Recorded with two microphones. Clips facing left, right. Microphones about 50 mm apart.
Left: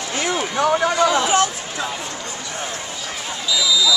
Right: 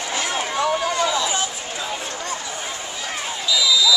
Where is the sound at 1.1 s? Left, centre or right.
Left.